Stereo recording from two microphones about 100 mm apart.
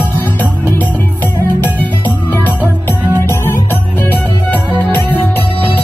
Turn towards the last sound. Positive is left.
turn(degrees=15)  # may be behind; listen again after turning